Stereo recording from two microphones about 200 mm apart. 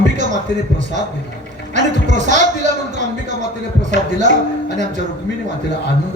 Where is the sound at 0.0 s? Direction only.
40° right (ahead or behind).